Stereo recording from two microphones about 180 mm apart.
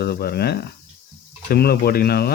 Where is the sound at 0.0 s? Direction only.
60° left (ahead or behind).